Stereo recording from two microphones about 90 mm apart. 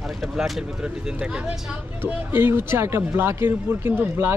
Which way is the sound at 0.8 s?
10° right (ahead or behind).